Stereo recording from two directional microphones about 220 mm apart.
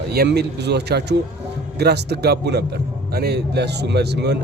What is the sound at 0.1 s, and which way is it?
Speech, 45° right (ahead or behind).